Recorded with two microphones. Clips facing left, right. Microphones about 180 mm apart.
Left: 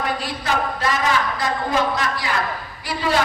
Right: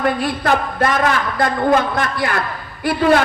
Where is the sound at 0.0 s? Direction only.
55° right (ahead or behind).